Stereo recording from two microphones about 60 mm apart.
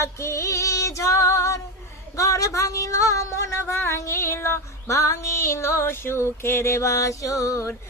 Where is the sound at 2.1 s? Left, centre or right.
Left.